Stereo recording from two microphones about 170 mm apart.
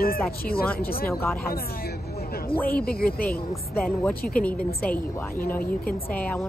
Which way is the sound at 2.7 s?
60° left (ahead or behind).